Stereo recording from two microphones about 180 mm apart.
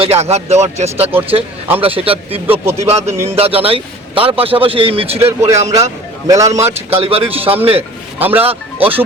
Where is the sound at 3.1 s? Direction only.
15° right (ahead or behind).